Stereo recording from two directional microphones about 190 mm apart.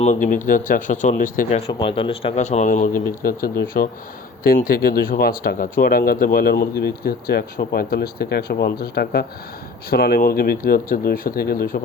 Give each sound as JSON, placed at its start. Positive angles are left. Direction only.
{"t": 0.0, "sound": "speech", "side_deg": 40}
{"t": 4.4, "sound": "speech", "side_deg": 50}